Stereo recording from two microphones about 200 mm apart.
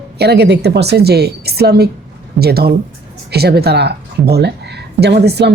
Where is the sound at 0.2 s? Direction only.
55° right (ahead or behind).